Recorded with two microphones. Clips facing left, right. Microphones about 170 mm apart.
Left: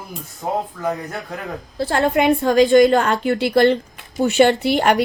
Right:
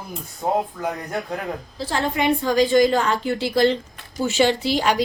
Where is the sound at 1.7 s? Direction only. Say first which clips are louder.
Left 7 dB; 60° left (ahead or behind).